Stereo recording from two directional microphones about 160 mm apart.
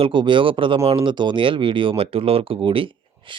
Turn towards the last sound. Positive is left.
turn(degrees=-35)  # may be behind; listen again after turning